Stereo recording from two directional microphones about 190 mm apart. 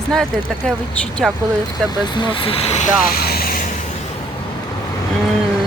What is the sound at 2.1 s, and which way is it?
Speech, 25° left (ahead or behind).